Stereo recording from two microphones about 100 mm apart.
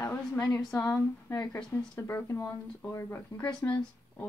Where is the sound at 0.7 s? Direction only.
20° left (ahead or behind).